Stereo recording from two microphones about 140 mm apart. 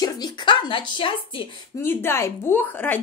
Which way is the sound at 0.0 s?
30° left (ahead or behind).